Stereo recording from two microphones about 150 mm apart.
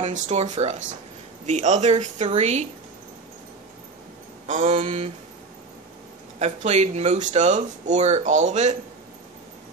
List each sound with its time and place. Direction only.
0.0 s speech: 50° right (ahead or behind)
4.5 s speech: 50° right (ahead or behind)
6.4 s speech: 50° right (ahead or behind)